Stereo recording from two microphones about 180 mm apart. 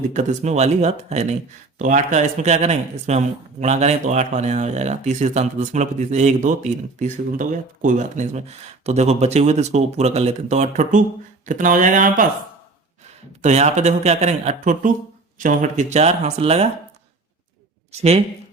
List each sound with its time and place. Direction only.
0.1 s speech: 40° right (ahead or behind)
13.4 s speech: 40° right (ahead or behind)